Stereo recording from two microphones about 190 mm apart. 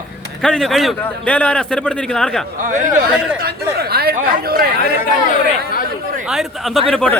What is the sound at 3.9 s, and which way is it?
Speech, 55° right (ahead or behind).